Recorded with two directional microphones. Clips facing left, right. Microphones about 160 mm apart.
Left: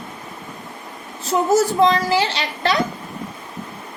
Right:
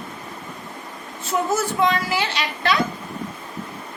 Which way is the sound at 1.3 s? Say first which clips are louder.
Left 6 dB; 35° left (ahead or behind).